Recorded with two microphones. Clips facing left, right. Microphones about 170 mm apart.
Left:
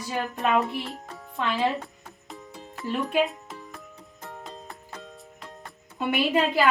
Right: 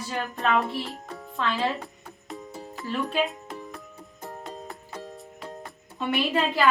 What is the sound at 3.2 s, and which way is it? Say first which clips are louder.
Music: right 2 dB; centre (ahead or behind).